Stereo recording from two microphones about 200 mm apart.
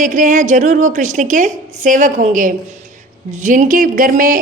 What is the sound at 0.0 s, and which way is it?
Speech, 40° right (ahead or behind).